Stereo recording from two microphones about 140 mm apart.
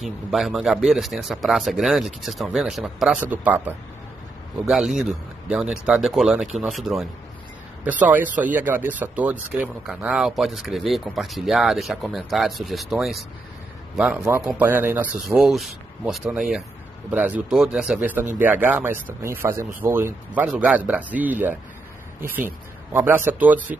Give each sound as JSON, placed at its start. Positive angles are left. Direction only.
{"t": 0.0, "sound": "speech", "side_deg": 0}
{"t": 8.0, "sound": "speech", "side_deg": -10}
{"t": 14.6, "sound": "speech", "side_deg": -15}
{"t": 15.3, "sound": "speech", "side_deg": 0}
{"t": 22.9, "sound": "speech", "side_deg": -15}